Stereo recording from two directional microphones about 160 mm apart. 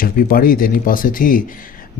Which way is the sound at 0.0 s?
65° left (ahead or behind).